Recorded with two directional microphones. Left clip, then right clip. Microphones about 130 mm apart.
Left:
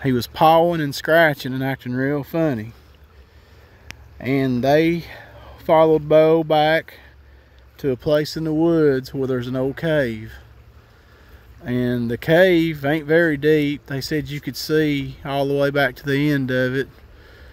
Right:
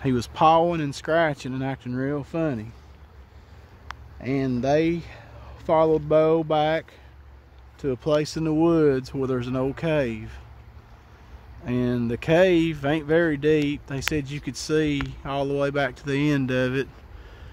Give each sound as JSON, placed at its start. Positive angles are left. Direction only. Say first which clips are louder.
{"t": 0.0, "sound": "speech", "louder": "left 4 dB", "side_deg": 40}
{"t": 3.8, "sound": "speech", "louder": "left 5 dB", "side_deg": 55}
{"t": 7.7, "sound": "a sound", "louder": "left 5 dB", "side_deg": 55}
{"t": 8.0, "sound": "speech", "louder": "left 3 dB", "side_deg": 30}
{"t": 11.6, "sound": "speech", "louder": "left 3 dB", "side_deg": 35}